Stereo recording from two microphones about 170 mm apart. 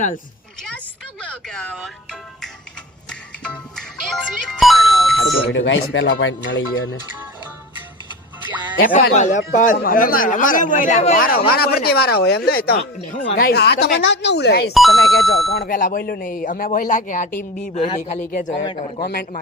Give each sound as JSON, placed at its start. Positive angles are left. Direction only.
{"t": 1.2, "sound": "speech", "side_deg": 5}
{"t": 3.1, "sound": "music", "side_deg": 5}
{"t": 5.2, "sound": "speech", "side_deg": -5}
{"t": 5.5, "sound": "speech", "side_deg": 90}
{"t": 8.8, "sound": "speech", "side_deg": 50}
{"t": 11.4, "sound": "speech", "side_deg": 65}
{"t": 14.7, "sound": "speech", "side_deg": 0}
{"t": 15.5, "sound": "speech", "side_deg": 60}
{"t": 18.6, "sound": "a man's voice", "side_deg": 30}
{"t": 19.0, "sound": "speech", "side_deg": 65}